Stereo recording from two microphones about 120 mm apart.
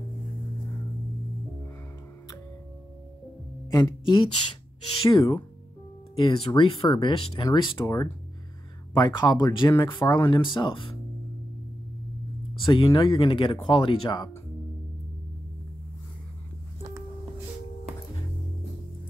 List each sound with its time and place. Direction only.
3.7 s speech: 40° left (ahead or behind)
7.8 s speech: 30° left (ahead or behind); by 11.0 s 45° left (ahead or behind)
12.6 s speech: 45° left (ahead or behind)